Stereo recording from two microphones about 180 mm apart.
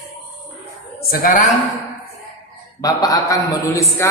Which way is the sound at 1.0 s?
55° left (ahead or behind).